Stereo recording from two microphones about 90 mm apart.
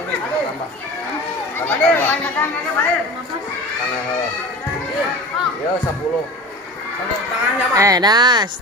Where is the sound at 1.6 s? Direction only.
20° left (ahead or behind).